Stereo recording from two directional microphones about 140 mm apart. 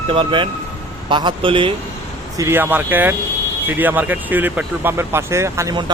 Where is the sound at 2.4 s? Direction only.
15° right (ahead or behind).